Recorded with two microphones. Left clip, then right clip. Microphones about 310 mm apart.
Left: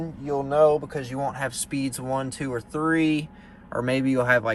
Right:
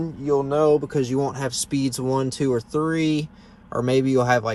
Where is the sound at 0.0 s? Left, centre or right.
Right.